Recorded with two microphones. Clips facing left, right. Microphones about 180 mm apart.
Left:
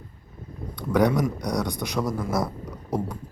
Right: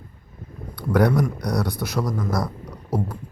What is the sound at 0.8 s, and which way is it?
Speech, 5° right (ahead or behind).